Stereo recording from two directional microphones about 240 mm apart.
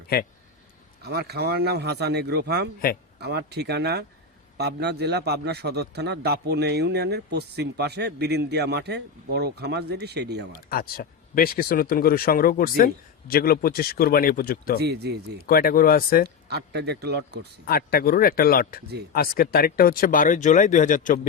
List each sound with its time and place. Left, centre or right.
1.0 s a man's voice: right
10.5 s speech: left
14.8 s a man's voice: right
15.4 s speech: left
16.5 s a man's voice: right
17.7 s speech: left